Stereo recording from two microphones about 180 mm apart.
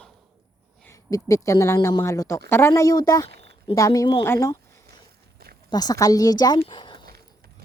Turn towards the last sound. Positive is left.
turn(degrees=25)  # may be behind; listen again after turning